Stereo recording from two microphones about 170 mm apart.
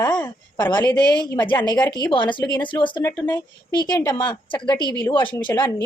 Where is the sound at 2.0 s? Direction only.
30° left (ahead or behind).